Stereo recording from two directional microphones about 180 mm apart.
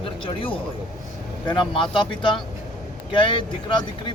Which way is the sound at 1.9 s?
25° left (ahead or behind).